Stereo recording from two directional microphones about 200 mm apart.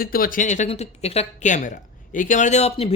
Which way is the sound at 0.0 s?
45° left (ahead or behind).